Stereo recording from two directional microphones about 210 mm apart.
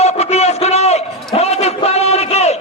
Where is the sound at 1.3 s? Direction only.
30° left (ahead or behind).